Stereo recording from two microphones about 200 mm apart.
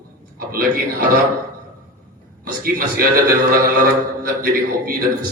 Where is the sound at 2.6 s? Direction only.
45° right (ahead or behind).